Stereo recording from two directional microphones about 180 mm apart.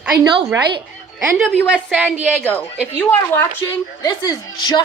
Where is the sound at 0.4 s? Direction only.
15° right (ahead or behind).